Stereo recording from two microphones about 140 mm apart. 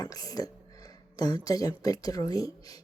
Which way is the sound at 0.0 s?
25° left (ahead or behind).